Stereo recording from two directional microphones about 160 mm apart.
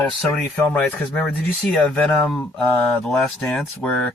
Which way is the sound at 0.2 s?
5° left (ahead or behind).